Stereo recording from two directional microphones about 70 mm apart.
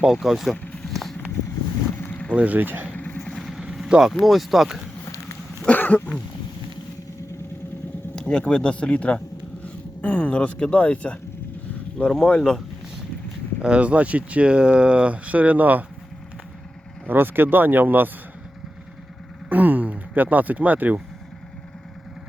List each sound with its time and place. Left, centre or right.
0.0 s speech: centre
0.5 s a sound: centre
2.0 s boat: left
2.3 s speech: right
2.9 s vehicle: left
3.3 s vehicle: centre
4.1 s speech: centre
5.6 s throat clearing: left
8.1 s speech: centre
13.6 s speech: centre
17.1 s speech: right
19.5 s a sound: right